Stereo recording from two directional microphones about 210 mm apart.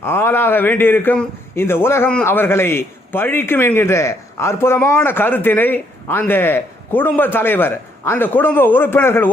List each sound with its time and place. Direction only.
0.0 s a man's voice: 10° left (ahead or behind)